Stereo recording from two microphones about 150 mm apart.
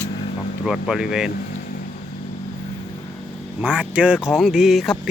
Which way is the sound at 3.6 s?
10° right (ahead or behind).